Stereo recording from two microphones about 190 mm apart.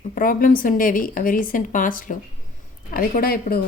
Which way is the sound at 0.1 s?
50° left (ahead or behind).